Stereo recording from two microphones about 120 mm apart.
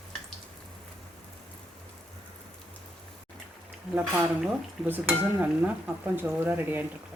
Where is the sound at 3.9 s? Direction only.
5° right (ahead or behind).